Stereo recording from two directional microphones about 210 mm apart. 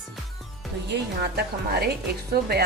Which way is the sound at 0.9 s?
50° right (ahead or behind).